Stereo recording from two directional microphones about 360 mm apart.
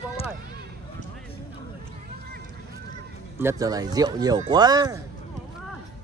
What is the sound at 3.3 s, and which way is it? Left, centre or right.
Speech, centre.